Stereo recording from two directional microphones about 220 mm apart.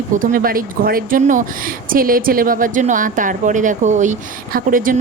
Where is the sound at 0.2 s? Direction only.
40° right (ahead or behind).